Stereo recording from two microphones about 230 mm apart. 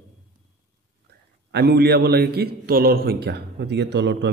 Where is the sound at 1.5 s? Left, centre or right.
Right.